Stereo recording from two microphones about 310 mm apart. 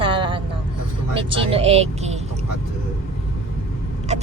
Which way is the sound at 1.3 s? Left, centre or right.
Centre.